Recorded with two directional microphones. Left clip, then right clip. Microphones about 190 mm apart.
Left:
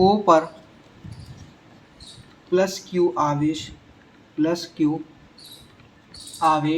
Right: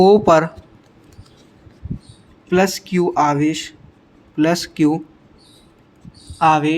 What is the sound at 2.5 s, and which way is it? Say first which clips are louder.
Speech: right 4 dB; 60° right (ahead or behind).